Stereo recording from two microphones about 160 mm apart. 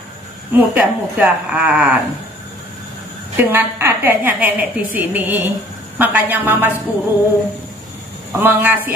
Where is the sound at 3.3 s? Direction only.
10° right (ahead or behind).